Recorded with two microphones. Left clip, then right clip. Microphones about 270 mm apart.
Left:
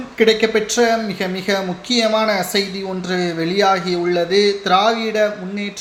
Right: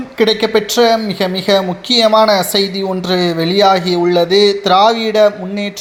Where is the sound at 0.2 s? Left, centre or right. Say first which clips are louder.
Right 2 dB; right.